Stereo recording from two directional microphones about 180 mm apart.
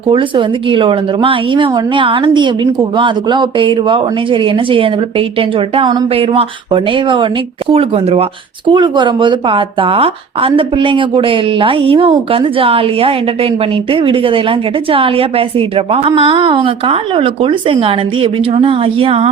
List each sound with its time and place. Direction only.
0.1 s a woman's voice: 30° right (ahead or behind)